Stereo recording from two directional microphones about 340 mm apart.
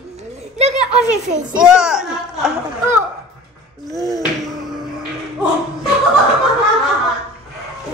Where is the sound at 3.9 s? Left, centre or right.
Centre.